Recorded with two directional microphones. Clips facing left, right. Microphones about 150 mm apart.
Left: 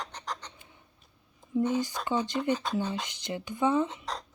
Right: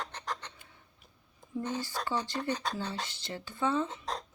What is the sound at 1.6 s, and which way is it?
Speech, 15° left (ahead or behind).